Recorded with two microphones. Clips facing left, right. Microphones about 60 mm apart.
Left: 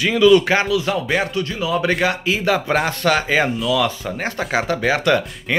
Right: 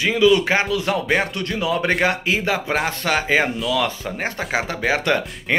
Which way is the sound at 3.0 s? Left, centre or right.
Centre.